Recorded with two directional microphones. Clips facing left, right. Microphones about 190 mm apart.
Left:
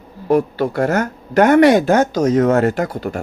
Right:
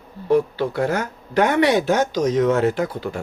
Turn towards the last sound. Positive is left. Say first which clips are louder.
# left 2 dB
turn(degrees=50)  # may be behind; listen again after turning